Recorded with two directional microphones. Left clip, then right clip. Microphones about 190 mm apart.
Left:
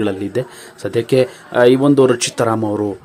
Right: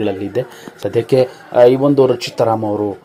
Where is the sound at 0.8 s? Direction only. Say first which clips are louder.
Right 1 dB; 10° left (ahead or behind).